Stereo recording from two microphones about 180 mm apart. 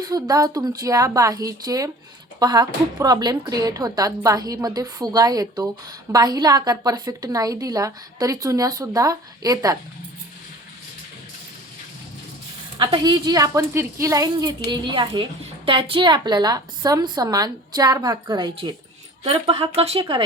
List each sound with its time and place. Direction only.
0.0 s a woman's voice: 20° right (ahead or behind)
12.8 s a woman's voice: 25° right (ahead or behind)